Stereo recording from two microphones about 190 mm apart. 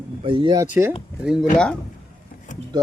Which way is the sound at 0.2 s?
25° right (ahead or behind).